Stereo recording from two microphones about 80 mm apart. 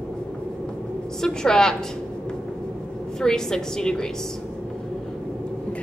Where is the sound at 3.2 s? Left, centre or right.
Centre.